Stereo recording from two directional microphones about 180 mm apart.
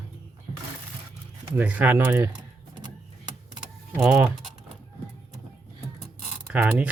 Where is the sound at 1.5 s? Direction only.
10° right (ahead or behind).